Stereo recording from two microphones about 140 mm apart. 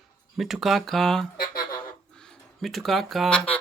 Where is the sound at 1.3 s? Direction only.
90° left.